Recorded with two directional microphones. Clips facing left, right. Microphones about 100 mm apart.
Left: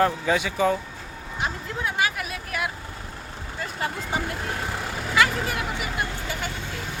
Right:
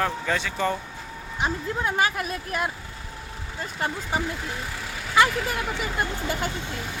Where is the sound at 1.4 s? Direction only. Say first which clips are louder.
Right 3 dB; 35° right (ahead or behind).